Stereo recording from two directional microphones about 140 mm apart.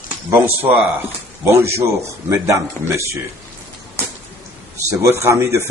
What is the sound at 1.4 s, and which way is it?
A man's voice, 20° right (ahead or behind).